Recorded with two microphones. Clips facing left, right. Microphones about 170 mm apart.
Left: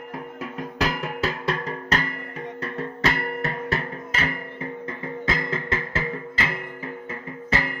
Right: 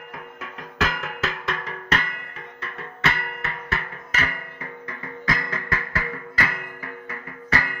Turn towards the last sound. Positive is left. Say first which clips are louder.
# left 1 dB
turn(degrees=25)  # may be behind; listen again after turning